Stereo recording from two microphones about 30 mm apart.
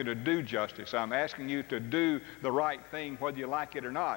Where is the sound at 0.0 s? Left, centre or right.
Left.